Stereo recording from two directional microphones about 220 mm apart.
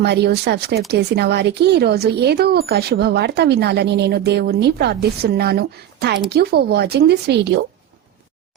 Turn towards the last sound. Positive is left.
turn(degrees=-50)  # may be behind; listen again after turning